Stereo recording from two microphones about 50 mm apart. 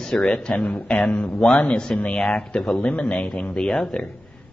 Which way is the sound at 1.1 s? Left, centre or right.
Left.